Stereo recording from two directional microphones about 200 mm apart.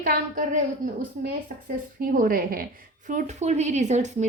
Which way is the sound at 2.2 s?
45° right (ahead or behind).